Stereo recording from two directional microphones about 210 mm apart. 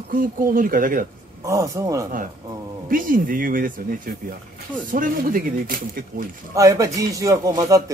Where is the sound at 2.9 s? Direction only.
40° right (ahead or behind).